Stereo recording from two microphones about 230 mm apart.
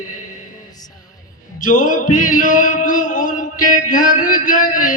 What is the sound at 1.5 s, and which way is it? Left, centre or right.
Music, left.